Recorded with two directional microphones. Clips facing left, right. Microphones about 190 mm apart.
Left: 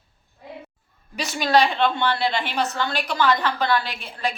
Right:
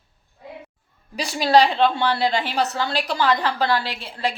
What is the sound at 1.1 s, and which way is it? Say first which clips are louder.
A woman's voice: right 3 dB; 35° right (ahead or behind).